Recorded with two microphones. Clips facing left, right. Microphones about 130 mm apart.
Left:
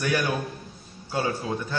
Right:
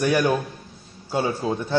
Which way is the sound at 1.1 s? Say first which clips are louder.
Right 4 dB; 25° right (ahead or behind).